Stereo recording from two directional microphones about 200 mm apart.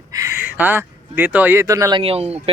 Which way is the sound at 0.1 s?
15° right (ahead or behind).